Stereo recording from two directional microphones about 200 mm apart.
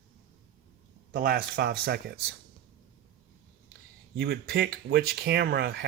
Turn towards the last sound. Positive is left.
turn(degrees=-50)  # may be behind; listen again after turning